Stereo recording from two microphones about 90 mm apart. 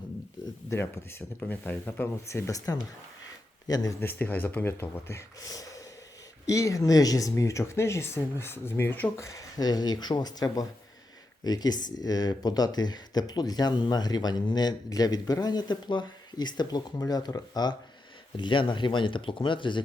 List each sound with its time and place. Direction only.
1.4 s speech: 20° left (ahead or behind)
2.2 s speech: 35° left (ahead or behind)
4.0 s speech: 20° left (ahead or behind)
9.2 s speech: 40° left (ahead or behind)
18.3 s speech: 65° left (ahead or behind)